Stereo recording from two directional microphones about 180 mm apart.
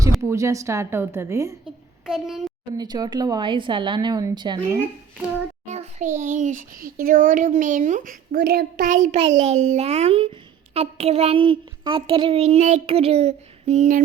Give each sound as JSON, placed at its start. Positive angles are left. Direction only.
{"t": 0.2, "sound": "a woman's voice", "side_deg": -15}
{"t": 2.0, "sound": "a child's voice", "side_deg": -5}
{"t": 2.7, "sound": "speech", "side_deg": -20}
{"t": 5.6, "sound": "a sound", "side_deg": -40}
{"t": 6.1, "sound": "a woman's voice", "side_deg": -45}